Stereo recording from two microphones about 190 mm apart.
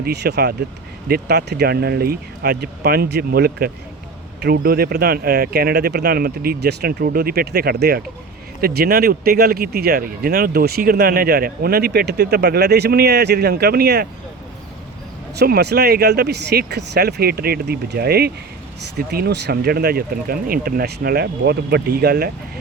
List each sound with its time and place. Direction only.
0.0 s speech: 60° right (ahead or behind)
15.4 s speech: 55° right (ahead or behind)